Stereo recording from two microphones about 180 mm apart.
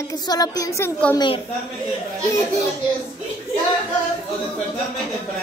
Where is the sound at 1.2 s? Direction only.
30° left (ahead or behind).